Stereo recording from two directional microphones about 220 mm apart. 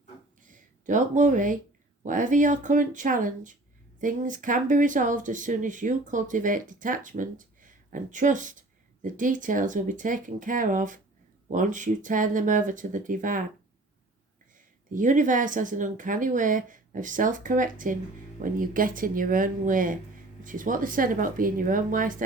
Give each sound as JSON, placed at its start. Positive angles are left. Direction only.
{"t": 0.4, "sound": "speech", "side_deg": -35}
{"t": 14.9, "sound": "speech", "side_deg": -35}